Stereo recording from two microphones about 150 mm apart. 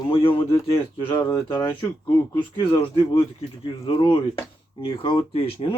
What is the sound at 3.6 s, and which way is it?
Speech, 35° left (ahead or behind).